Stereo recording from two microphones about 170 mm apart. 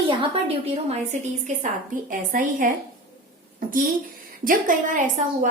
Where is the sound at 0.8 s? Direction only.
45° right (ahead or behind).